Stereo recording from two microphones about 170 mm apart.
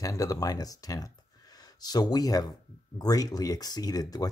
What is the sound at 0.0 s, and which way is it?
Speech, 20° left (ahead or behind).